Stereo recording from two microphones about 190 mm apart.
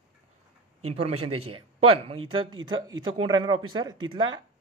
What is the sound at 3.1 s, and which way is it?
Speech, 25° right (ahead or behind).